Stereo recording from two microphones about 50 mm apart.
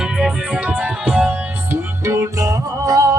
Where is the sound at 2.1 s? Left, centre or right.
Right.